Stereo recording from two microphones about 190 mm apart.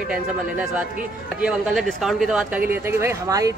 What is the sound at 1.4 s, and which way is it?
Speech, centre (ahead or behind).